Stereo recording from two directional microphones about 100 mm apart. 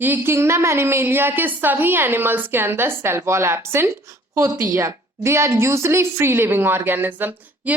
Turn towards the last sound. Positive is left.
turn(degrees=-15)  # may be behind; listen again after turning